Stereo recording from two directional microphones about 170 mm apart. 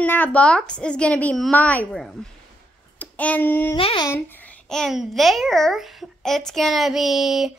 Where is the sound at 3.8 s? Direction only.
35° left (ahead or behind).